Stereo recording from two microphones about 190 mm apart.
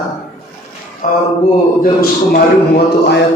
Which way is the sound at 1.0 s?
40° left (ahead or behind).